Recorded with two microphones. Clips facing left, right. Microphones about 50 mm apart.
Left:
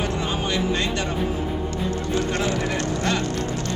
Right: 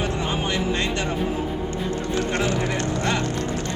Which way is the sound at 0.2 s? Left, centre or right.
Right.